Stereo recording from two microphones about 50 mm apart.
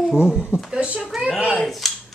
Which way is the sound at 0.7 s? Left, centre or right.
Right.